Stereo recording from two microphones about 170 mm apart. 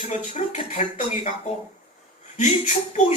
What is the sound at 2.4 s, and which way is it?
Speech, 45° left (ahead or behind).